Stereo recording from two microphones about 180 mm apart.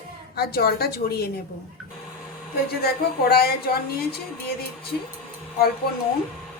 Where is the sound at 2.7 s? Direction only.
60° left (ahead or behind).